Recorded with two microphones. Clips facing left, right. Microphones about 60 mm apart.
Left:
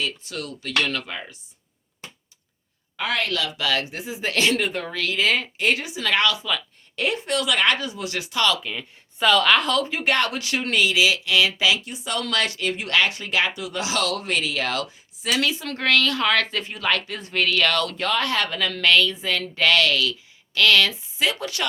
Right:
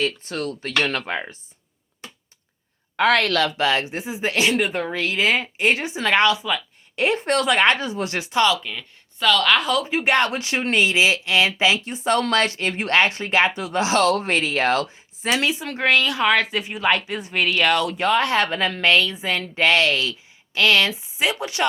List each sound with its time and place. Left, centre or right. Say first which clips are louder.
0.0 s speech: right 5 dB; right
2.9 s a woman's voice: right 7 dB; right
3.6 s speech: right 4 dB; right
7.3 s speech: right 4 dB; right
8.6 s speech: left 1 dB; centre
9.5 s speech: even; centre
9.9 s speech: right 3 dB; right